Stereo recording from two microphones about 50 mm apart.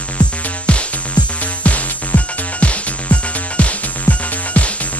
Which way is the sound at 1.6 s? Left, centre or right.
Left.